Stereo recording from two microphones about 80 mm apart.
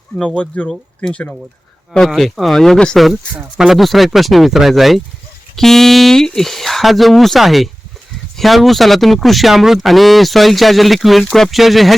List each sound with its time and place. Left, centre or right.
0.3 s speech: centre
2.0 s speech: centre